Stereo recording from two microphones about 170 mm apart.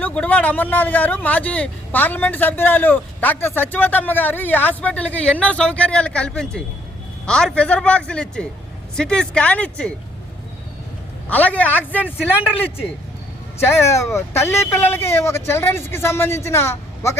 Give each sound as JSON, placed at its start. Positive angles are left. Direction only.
{"t": 0.0, "sound": "speech", "side_deg": 10}
{"t": 11.3, "sound": "speech", "side_deg": 10}
{"t": 13.7, "sound": "speech", "side_deg": 15}